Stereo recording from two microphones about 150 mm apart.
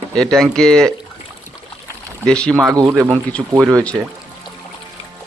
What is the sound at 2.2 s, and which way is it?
Speech, 5° left (ahead or behind).